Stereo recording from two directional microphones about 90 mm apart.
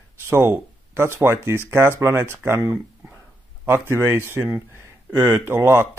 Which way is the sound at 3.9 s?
25° right (ahead or behind).